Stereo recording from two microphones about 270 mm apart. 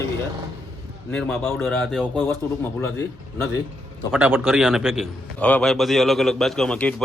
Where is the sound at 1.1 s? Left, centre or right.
Centre.